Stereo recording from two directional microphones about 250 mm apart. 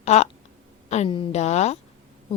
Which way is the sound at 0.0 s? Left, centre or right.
Left.